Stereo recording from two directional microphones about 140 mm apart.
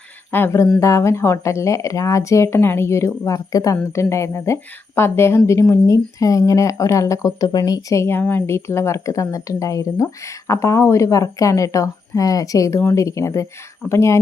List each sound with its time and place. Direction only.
0.3 s speech: 15° left (ahead or behind)